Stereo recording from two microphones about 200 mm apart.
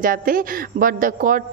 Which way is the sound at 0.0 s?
45° right (ahead or behind).